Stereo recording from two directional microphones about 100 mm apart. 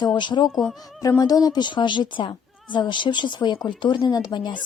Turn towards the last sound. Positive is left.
turn(degrees=50)  # may be behind; listen again after turning